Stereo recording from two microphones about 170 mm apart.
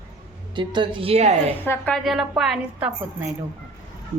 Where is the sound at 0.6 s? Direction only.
30° right (ahead or behind).